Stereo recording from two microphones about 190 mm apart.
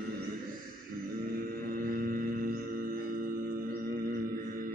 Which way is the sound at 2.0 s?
50° right (ahead or behind).